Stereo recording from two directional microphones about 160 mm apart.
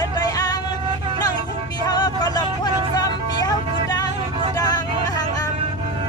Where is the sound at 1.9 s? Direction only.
25° left (ahead or behind).